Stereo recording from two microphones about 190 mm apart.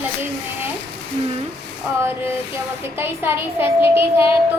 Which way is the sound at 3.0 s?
10° right (ahead or behind).